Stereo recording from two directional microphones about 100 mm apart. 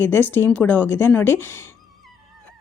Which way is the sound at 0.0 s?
20° left (ahead or behind).